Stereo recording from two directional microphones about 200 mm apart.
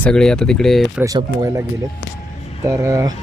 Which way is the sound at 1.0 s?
15° right (ahead or behind).